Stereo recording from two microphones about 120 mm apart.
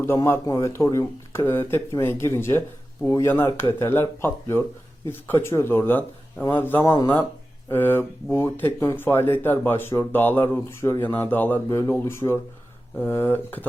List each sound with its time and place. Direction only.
0.0 s speech: 20° left (ahead or behind)